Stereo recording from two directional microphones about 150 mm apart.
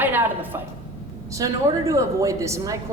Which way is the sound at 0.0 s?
10° right (ahead or behind).